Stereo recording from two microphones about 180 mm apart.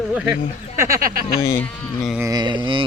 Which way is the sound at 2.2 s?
20° right (ahead or behind).